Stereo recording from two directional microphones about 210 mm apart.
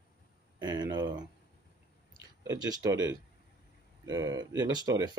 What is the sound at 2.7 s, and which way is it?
Speech, 15° right (ahead or behind).